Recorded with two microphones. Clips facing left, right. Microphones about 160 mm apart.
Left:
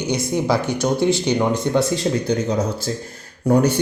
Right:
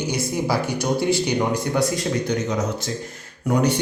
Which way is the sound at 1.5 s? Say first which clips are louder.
Left 3 dB; 25° left (ahead or behind).